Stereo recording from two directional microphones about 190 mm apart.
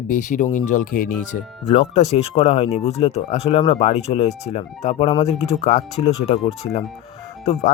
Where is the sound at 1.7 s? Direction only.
30° left (ahead or behind).